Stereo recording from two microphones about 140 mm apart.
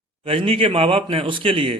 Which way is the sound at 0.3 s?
40° right (ahead or behind).